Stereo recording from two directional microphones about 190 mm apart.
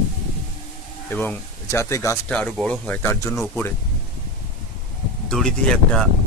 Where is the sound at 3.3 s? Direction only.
Centre (ahead or behind).